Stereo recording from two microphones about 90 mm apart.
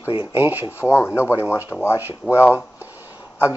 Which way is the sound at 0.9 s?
30° left (ahead or behind).